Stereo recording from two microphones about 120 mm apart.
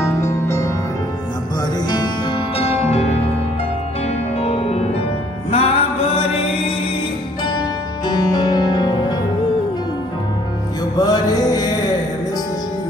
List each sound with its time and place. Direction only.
0.0 s music: 25° left (ahead or behind)
1.9 s music: 40° left (ahead or behind); by 3.1 s 60° left (ahead or behind)
4.4 s music: 55° left (ahead or behind)
7.4 s music: 35° left (ahead or behind)
11.0 s music: 35° left (ahead or behind)